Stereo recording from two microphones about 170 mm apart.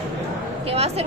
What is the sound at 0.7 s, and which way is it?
Speech, 40° right (ahead or behind).